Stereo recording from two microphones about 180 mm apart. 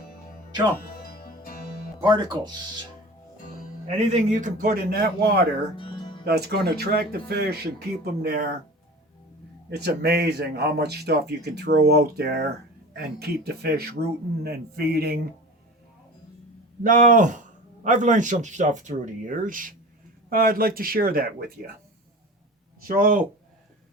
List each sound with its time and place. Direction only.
1.0 s music: 55° left (ahead or behind)
2.0 s speech: 25° right (ahead or behind)
3.8 s speech: 40° right (ahead or behind); by 5.4 s 65° right (ahead or behind)
5.7 s music: 30° left (ahead or behind)
6.2 s a man's voice: 65° right (ahead or behind)
9.6 s a man's voice: 65° right (ahead or behind)
16.8 s a man's voice: 45° right (ahead or behind)
22.8 s speech: 55° right (ahead or behind)